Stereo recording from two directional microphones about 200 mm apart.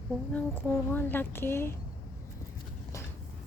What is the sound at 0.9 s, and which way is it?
Speech, 10° left (ahead or behind).